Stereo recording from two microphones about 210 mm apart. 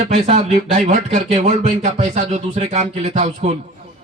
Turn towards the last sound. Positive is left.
turn(degrees=-35)  # may be behind; listen again after turning